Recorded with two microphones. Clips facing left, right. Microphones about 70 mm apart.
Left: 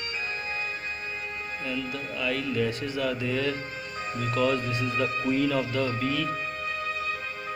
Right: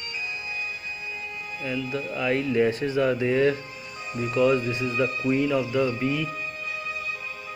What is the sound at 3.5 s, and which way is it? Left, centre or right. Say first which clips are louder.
Music: left 2 dB; left.